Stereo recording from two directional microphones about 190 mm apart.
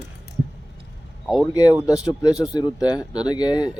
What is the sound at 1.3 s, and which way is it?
Speech, centre (ahead or behind).